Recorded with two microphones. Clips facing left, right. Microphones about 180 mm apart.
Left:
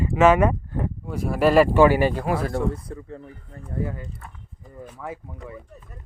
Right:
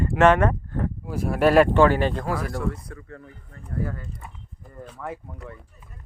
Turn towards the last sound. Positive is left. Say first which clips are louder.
# left 2 dB
turn(degrees=0)  # may be behind; listen again after turning